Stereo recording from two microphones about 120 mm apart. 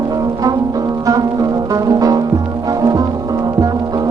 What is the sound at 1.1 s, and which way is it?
Music, 30° right (ahead or behind).